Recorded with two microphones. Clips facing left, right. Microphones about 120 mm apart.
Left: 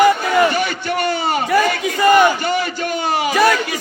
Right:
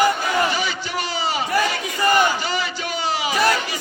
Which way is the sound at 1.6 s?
55° left (ahead or behind).